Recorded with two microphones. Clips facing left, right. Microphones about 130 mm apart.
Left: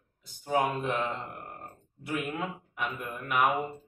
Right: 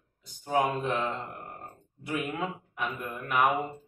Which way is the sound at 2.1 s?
15° right (ahead or behind).